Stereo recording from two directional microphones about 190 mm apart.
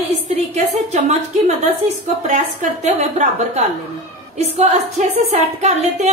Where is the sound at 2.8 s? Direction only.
40° right (ahead or behind).